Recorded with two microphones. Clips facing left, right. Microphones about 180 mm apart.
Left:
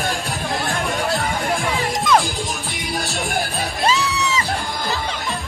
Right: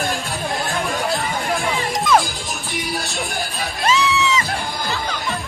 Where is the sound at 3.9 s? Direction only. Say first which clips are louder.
Right 3 dB; 40° left (ahead or behind).